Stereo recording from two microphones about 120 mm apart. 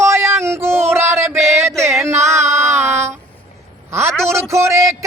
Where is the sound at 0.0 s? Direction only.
20° right (ahead or behind).